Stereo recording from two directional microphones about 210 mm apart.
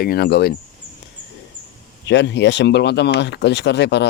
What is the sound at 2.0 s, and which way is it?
Speech, 55° left (ahead or behind).